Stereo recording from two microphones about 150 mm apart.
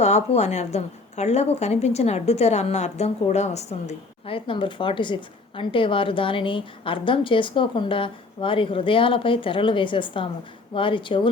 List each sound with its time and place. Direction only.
0.3 s a woman's voice: 50° left (ahead or behind)